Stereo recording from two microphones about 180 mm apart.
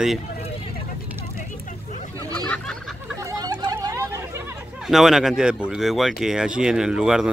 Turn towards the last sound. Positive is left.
turn(degrees=-5)  # may be behind; listen again after turning